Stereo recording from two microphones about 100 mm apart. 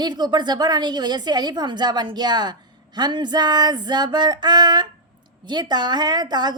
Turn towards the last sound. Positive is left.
turn(degrees=-45)  # may be behind; listen again after turning